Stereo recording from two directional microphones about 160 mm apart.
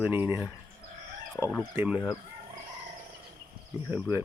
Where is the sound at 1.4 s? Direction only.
10° left (ahead or behind).